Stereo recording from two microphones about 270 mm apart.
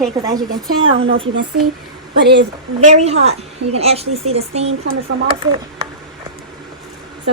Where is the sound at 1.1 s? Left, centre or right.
Right.